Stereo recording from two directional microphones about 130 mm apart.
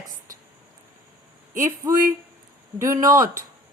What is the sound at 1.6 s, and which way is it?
Speech, 25° right (ahead or behind).